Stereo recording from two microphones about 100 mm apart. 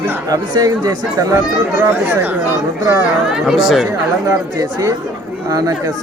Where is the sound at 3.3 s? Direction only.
5° right (ahead or behind).